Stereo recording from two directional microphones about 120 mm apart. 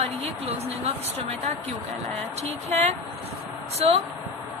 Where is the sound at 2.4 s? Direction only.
65° right (ahead or behind).